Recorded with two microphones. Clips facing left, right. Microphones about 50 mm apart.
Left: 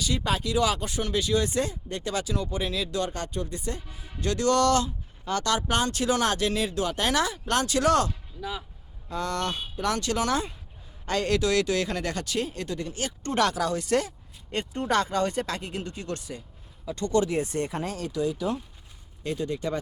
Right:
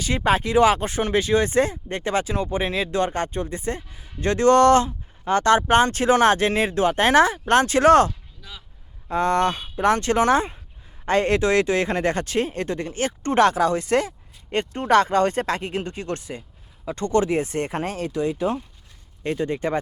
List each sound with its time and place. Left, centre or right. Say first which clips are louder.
0.0 s speech: right 7 dB; right
8.4 s speech: left 8 dB; centre
9.0 s speech: right 9 dB; right